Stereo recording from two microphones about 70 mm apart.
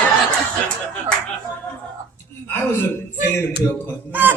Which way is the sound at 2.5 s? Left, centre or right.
Left.